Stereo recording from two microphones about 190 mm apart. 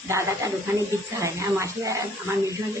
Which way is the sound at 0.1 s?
15° right (ahead or behind).